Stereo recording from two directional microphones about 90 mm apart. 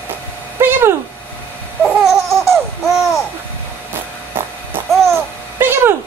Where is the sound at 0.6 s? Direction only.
25° right (ahead or behind).